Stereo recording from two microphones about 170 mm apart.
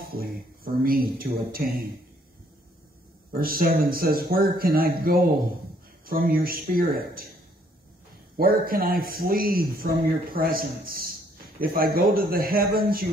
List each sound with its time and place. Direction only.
0.0 s a sound: 60° right (ahead or behind)
0.8 s a man's voice: 60° right (ahead or behind)
3.3 s a man's voice: 60° right (ahead or behind)
8.4 s a man's voice: 60° right (ahead or behind)